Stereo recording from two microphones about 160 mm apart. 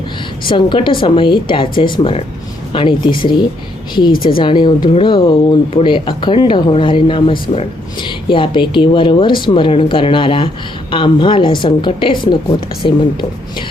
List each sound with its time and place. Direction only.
0.4 s speech: 30° left (ahead or behind)
4.1 s speech: 65° left (ahead or behind)
4.4 s speech: 30° left (ahead or behind)